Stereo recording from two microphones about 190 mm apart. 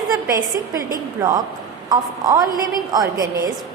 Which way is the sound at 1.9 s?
20° right (ahead or behind).